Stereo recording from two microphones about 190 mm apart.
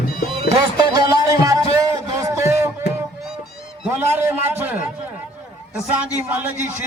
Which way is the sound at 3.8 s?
10° right (ahead or behind).